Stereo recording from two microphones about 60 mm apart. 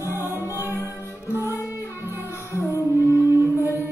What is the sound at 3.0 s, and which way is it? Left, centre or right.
Music, left.